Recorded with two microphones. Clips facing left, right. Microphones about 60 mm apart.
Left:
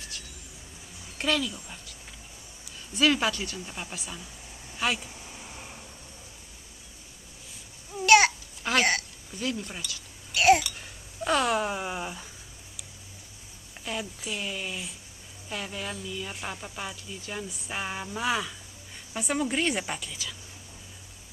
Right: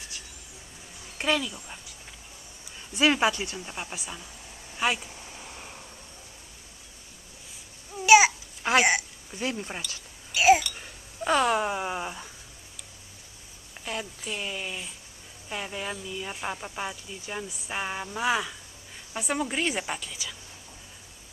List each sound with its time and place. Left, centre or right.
1.1 s speech: centre
3.0 s speech: right
8.0 s babbling: centre
8.6 s hiccup: centre
9.4 s speech: right
10.3 s babbling: centre
10.8 s speech: centre
13.8 s a woman's voice: centre
15.5 s a woman's voice: centre